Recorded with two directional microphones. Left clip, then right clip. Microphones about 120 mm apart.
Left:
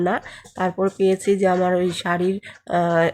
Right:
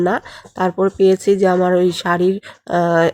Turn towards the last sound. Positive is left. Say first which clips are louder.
# right 4 dB
turn(degrees=-35)  # may be behind; listen again after turning